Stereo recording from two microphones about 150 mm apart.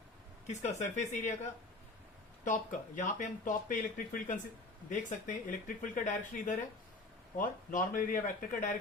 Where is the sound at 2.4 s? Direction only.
55° left (ahead or behind).